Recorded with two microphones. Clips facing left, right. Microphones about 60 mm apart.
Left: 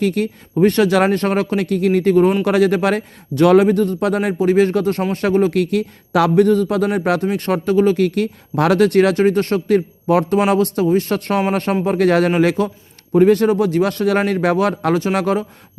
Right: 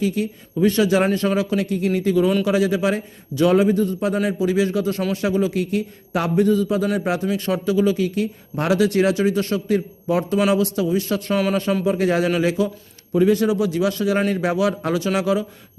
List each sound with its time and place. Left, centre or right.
0.0 s a man's voice: left